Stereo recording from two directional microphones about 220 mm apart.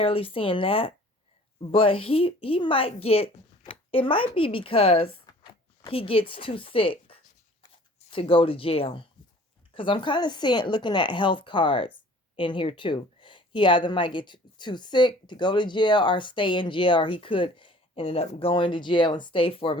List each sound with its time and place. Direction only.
0.0 s speech: 25° left (ahead or behind)